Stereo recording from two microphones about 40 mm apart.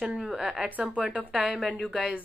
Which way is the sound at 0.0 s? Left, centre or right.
Centre.